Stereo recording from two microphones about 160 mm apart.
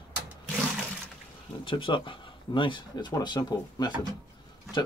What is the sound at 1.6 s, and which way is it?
Speech, 30° left (ahead or behind).